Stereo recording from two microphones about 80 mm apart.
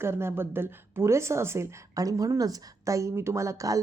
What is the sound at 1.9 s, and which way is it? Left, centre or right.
A woman's voice, right.